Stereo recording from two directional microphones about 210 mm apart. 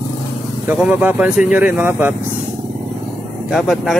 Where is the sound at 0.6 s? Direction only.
5° right (ahead or behind).